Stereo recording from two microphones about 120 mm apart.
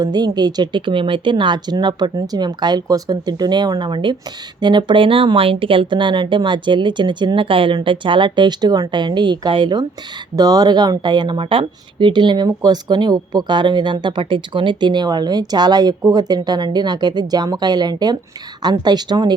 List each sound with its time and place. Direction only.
0.0 s a woman's voice: 35° right (ahead or behind)